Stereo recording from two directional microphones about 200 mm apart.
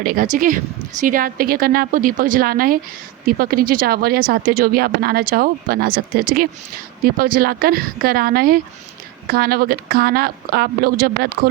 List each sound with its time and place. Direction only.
0.0 s speech: 45° right (ahead or behind)